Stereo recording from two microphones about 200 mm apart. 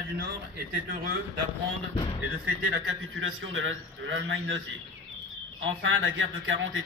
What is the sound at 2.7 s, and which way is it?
A man's voice, 85° right.